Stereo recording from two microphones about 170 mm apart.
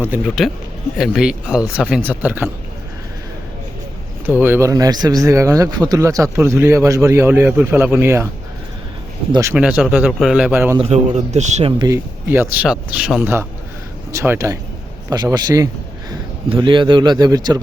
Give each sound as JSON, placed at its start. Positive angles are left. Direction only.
{"t": 0.0, "sound": "speech", "side_deg": -5}
{"t": 4.3, "sound": "speech", "side_deg": -10}
{"t": 9.3, "sound": "speech", "side_deg": -15}
{"t": 9.6, "sound": "speech", "side_deg": -5}
{"t": 10.8, "sound": "a man's voice", "side_deg": -40}
{"t": 11.8, "sound": "speech", "side_deg": -15}
{"t": 14.1, "sound": "a man's voice", "side_deg": -15}